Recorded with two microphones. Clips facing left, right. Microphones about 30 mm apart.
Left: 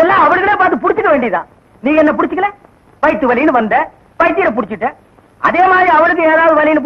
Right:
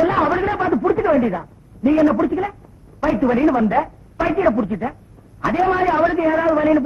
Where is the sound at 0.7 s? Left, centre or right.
Left.